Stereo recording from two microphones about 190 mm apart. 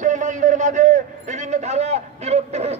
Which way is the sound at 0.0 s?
40° right (ahead or behind).